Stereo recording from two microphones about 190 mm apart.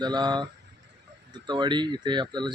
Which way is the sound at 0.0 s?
20° right (ahead or behind).